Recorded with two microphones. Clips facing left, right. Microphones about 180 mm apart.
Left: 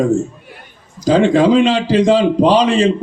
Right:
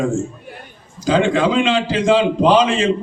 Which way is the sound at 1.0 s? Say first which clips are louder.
Left 5 dB; 40° left (ahead or behind).